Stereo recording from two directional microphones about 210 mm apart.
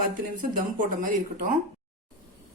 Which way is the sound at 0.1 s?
40° right (ahead or behind).